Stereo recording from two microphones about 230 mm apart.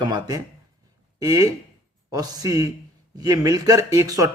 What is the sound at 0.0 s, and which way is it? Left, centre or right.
A man's voice, centre.